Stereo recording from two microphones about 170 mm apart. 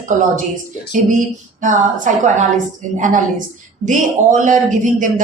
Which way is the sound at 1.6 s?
50° right (ahead or behind).